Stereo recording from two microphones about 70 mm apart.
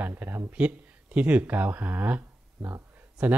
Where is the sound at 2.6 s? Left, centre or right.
Right.